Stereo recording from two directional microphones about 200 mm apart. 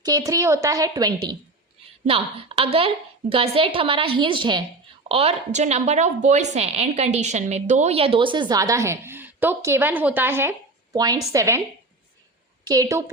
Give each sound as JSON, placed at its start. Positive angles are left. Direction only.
{"t": 0.0, "sound": "a woman's voice", "side_deg": -20}
{"t": 12.6, "sound": "a woman's voice", "side_deg": -20}